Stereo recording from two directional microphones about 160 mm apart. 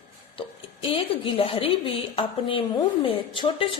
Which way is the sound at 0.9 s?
35° left (ahead or behind).